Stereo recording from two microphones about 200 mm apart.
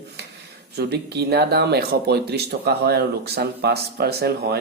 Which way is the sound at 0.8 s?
55° right (ahead or behind).